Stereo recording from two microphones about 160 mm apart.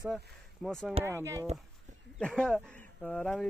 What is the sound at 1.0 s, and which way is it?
Speech, 15° right (ahead or behind).